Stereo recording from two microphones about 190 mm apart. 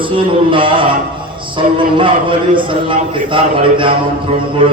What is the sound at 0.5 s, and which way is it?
A man's voice, 25° right (ahead or behind).